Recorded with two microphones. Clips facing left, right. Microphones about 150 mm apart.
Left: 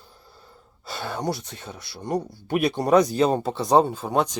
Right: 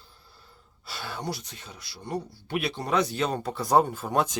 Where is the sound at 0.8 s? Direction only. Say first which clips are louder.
Left 6 dB; 50° left (ahead or behind); by 4.3 s 20° left (ahead or behind).